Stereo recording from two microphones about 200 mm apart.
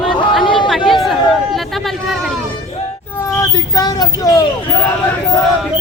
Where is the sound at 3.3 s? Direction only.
20° left (ahead or behind).